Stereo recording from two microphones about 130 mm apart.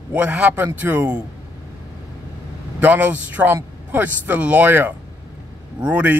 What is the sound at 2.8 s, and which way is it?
A man's voice, 15° right (ahead or behind).